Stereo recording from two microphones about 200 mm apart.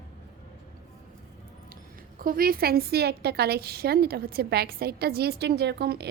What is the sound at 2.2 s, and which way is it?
A woman's voice, 45° right (ahead or behind).